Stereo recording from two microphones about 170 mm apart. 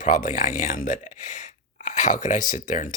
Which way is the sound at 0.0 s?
50° left (ahead or behind).